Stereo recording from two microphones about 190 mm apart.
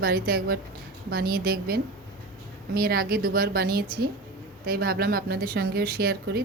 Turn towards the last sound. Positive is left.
turn(degrees=-55)  # may be behind; listen again after turning